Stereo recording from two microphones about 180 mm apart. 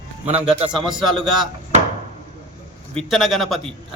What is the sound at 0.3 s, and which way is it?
Speech, 35° right (ahead or behind).